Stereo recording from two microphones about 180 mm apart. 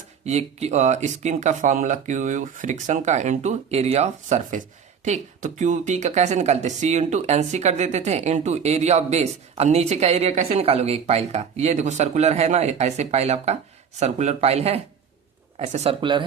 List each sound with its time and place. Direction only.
0.3 s speech: 35° right (ahead or behind)